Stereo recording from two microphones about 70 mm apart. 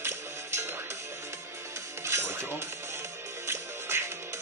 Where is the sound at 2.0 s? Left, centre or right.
Right.